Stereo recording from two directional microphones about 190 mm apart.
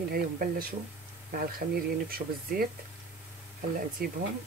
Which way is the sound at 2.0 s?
50° right (ahead or behind).